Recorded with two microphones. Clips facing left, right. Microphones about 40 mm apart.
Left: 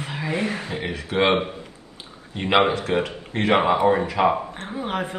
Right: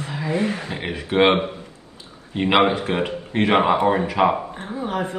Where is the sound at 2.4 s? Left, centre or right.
Right.